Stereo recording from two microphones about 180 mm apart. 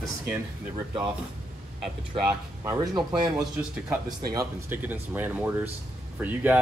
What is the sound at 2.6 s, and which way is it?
Speech, 20° right (ahead or behind).